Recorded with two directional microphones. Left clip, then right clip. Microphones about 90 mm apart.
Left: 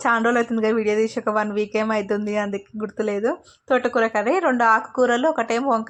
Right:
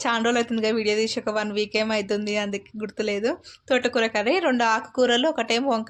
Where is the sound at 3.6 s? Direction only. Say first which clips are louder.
Left 3 dB; 15° left (ahead or behind).